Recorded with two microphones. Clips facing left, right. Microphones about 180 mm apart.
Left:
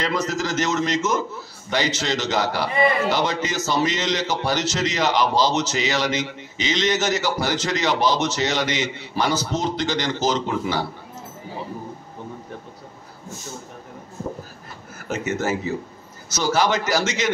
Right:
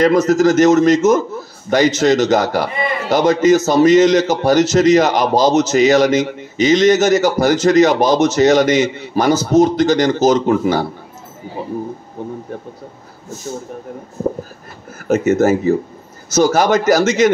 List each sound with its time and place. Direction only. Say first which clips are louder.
0.0 s a man's voice: right 13 dB; 45° right (ahead or behind)
15.0 s a man's voice: right 11 dB; 50° right (ahead or behind)